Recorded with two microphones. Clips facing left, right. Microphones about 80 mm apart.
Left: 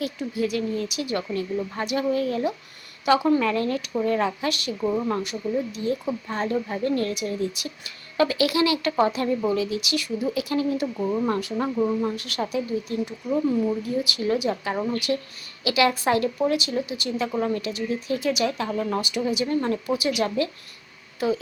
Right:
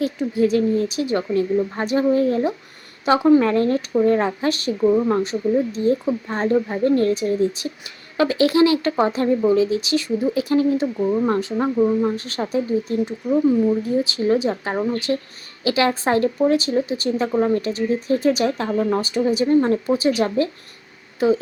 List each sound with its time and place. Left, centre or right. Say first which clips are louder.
0.3 s speech: right 8 dB; right
4.8 s speech: right 8 dB; centre
5.0 s speech: right 7 dB; right
10.9 s speech: right 5 dB; centre
11.3 s speech: right 5 dB; right
11.8 s speech: right 6 dB; centre
12.0 s speech: right 4 dB; right
13.2 s speech: right 6 dB; centre
13.8 s speech: right 6 dB; right